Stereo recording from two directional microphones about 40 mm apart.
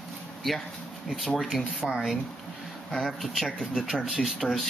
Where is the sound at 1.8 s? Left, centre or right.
Centre.